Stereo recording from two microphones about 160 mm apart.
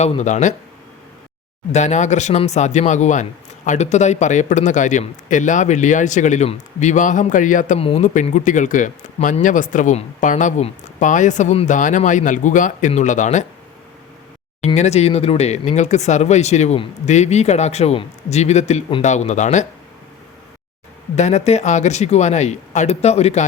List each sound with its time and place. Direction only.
0.0 s speech: 45° left (ahead or behind)
1.7 s speech: 45° left (ahead or behind)
7.8 s speech: 40° left (ahead or behind)
14.8 s speech: 40° left (ahead or behind)
21.2 s speech: 45° left (ahead or behind)